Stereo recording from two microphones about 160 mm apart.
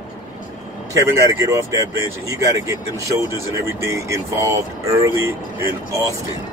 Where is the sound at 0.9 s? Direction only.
20° right (ahead or behind).